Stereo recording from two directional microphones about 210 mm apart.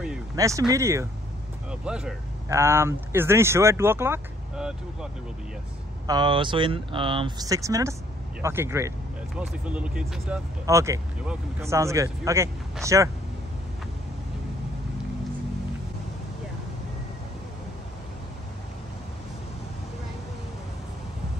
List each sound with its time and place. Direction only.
0.4 s speech: 15° right (ahead or behind)
1.7 s speech: 5° right (ahead or behind)
6.0 s speech: 20° right (ahead or behind)